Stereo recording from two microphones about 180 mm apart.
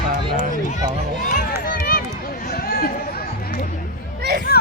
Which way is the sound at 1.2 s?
45° left (ahead or behind).